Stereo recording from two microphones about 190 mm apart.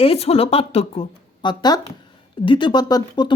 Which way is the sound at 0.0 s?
30° left (ahead or behind).